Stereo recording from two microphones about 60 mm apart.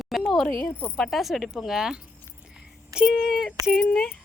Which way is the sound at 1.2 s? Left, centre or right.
Centre.